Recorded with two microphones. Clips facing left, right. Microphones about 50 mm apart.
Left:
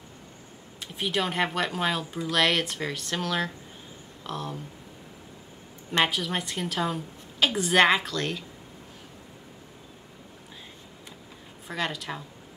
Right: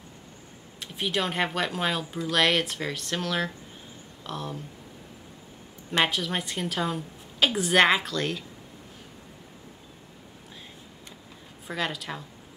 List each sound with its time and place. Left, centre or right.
0.7 s speech: centre
5.9 s speech: centre
11.6 s speech: centre